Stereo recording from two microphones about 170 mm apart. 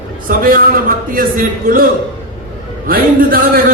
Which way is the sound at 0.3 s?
55° right (ahead or behind).